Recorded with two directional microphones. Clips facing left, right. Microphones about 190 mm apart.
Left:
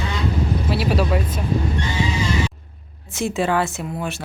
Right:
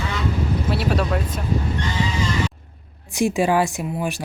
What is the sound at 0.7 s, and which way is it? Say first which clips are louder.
Speech: left 2 dB; 5° left (ahead or behind).